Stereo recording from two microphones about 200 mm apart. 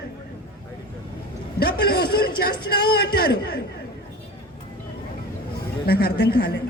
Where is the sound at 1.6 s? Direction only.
50° left (ahead or behind).